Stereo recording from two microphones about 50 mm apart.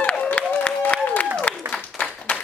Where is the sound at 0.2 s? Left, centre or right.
Left.